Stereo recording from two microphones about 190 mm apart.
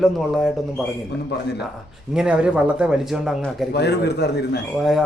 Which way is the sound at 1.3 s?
60° left (ahead or behind).